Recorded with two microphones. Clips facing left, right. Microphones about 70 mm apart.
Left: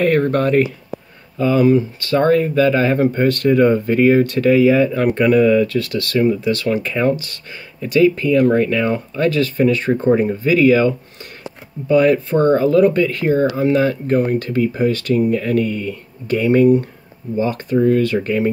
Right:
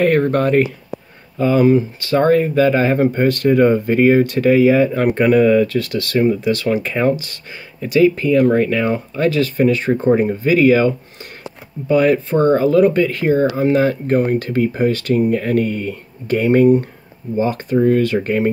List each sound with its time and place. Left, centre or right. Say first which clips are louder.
0.3 s speech: even; centre
11.9 s speech: left 1 dB; centre; by 18.5 s right